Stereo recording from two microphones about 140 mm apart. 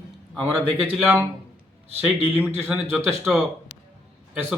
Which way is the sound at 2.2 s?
15° right (ahead or behind).